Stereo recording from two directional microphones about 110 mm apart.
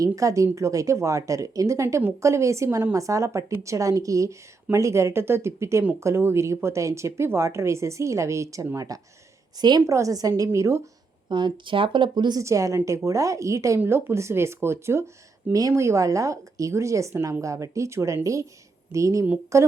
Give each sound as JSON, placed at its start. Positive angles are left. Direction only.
{"t": 0.0, "sound": "a woman's voice", "side_deg": -30}
{"t": 9.8, "sound": "speech", "side_deg": -30}
{"t": 11.3, "sound": "speech", "side_deg": -45}
{"t": 12.4, "sound": "speech", "side_deg": -30}